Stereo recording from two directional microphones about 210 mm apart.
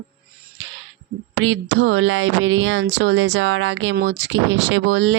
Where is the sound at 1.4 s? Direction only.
60° right (ahead or behind).